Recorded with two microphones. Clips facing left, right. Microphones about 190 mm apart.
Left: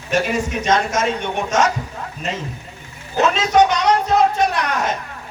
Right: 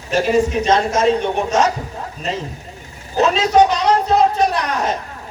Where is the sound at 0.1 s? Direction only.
35° right (ahead or behind).